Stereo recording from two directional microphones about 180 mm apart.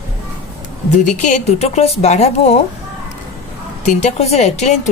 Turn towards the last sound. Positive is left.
turn(degrees=40)  # may be behind; listen again after turning